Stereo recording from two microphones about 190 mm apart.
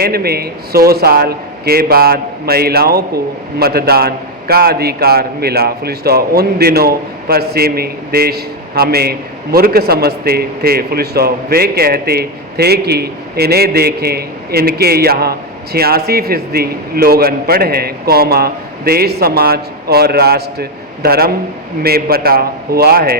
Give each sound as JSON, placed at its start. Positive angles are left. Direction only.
{"t": 0.0, "sound": "a man's voice", "side_deg": -55}